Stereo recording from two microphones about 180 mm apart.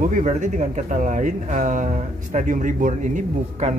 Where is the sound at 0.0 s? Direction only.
45° right (ahead or behind).